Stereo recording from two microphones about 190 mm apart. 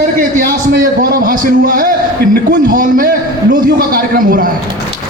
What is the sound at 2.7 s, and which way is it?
A man's voice, 45° right (ahead or behind).